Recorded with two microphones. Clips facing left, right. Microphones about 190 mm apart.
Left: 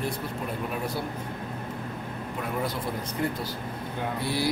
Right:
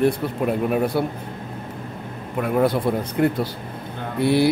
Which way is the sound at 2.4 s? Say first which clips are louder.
Right 12 dB; 60° right (ahead or behind).